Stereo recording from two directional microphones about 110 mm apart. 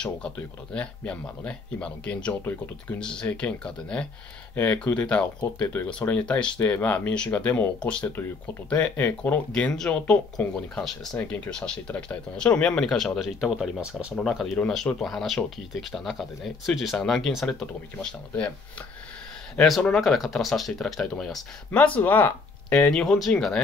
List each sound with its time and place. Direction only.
0.4 s speech: 10° left (ahead or behind)
17.9 s speech: 15° left (ahead or behind)
19.5 s speech: 5° left (ahead or behind)